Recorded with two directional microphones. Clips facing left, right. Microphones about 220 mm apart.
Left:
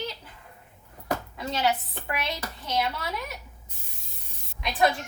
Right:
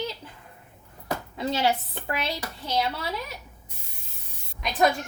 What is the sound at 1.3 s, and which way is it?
A woman's voice, 25° right (ahead or behind).